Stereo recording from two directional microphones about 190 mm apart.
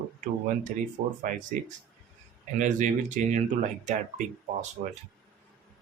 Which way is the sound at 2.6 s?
40° right (ahead or behind).